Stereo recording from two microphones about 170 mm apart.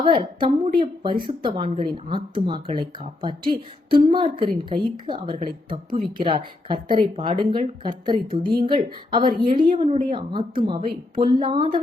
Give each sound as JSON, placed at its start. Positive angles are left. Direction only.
{"t": 0.2, "sound": "a woman's voice", "side_deg": -30}
{"t": 9.2, "sound": "a woman's voice", "side_deg": -55}
{"t": 9.5, "sound": "a woman's voice", "side_deg": -30}